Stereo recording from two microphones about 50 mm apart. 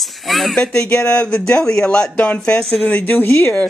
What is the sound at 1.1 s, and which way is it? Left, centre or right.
Speech, centre.